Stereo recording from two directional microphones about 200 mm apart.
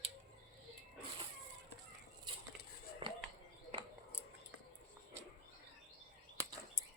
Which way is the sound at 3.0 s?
25° right (ahead or behind).